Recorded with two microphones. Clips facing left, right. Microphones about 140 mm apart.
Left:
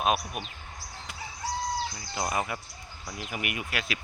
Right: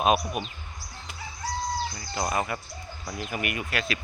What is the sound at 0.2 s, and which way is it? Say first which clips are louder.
Speech: right 6 dB; 45° right (ahead or behind).